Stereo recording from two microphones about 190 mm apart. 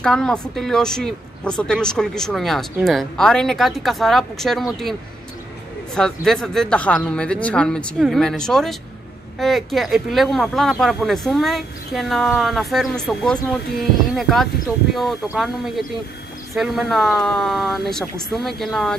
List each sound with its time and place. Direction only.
0.0 s speech: 5° left (ahead or behind)
5.9 s speech: 5° left (ahead or behind)